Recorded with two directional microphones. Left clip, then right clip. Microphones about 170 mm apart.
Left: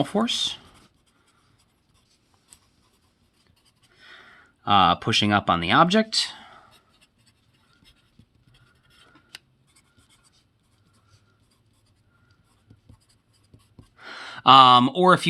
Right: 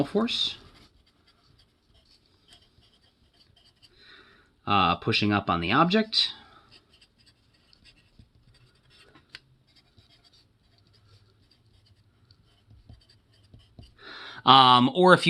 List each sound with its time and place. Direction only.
0.0 s speech: 50° left (ahead or behind)
4.0 s speech: 45° left (ahead or behind)
13.9 s gasp: 45° left (ahead or behind); by 15.3 s 10° left (ahead or behind)